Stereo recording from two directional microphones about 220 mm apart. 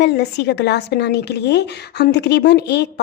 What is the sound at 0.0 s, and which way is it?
A woman's voice, 50° left (ahead or behind).